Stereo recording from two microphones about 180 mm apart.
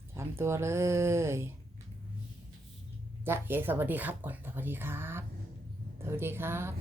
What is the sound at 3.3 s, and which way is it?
Speech, 10° right (ahead or behind).